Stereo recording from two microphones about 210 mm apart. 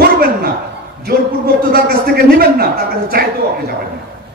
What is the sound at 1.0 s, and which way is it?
A man's voice, 45° right (ahead or behind).